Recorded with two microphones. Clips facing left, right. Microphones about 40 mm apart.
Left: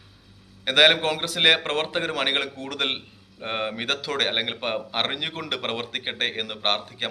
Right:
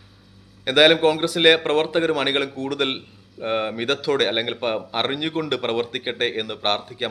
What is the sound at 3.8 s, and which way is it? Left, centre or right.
Speech, left.